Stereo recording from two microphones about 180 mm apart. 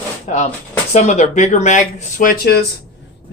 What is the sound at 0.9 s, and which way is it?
Speech, 40° left (ahead or behind).